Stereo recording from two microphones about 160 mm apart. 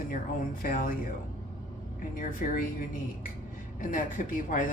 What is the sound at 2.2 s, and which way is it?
Speech, 55° left (ahead or behind).